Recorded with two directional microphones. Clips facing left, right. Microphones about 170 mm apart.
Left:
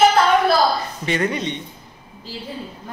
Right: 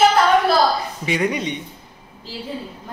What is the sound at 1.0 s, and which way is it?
Speech, 10° right (ahead or behind).